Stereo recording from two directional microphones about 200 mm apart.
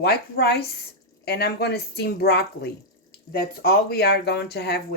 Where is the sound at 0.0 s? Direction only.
55° left (ahead or behind).